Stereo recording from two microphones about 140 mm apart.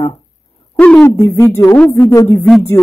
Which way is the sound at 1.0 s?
15° left (ahead or behind).